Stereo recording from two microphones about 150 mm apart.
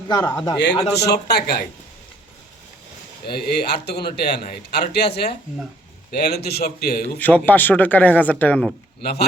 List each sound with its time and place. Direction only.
0.1 s a man's voice: 25° left (ahead or behind)
0.9 s a man's voice: 90° left
3.2 s a man's voice: 90° left
6.5 s a man's voice: 90° left
7.2 s speech: 10° left (ahead or behind)